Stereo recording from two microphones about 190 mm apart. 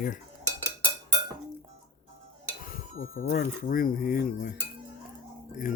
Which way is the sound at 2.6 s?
50° left (ahead or behind).